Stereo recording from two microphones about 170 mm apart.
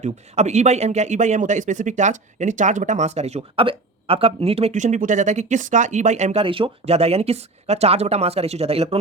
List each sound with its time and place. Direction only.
0.0 s speech: 40° right (ahead or behind)